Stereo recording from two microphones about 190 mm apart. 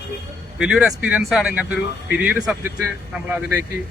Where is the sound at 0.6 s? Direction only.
5° right (ahead or behind).